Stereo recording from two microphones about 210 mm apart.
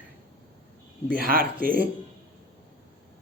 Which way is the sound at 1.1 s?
45° right (ahead or behind).